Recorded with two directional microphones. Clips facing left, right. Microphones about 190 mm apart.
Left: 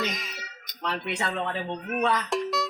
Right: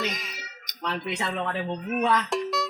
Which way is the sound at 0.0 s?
Centre (ahead or behind).